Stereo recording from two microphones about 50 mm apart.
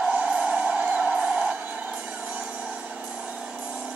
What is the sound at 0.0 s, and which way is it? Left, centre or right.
Music, right.